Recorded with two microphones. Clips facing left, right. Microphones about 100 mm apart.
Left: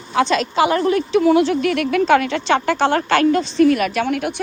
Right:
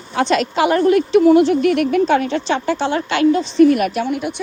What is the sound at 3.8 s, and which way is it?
Speech, 85° left.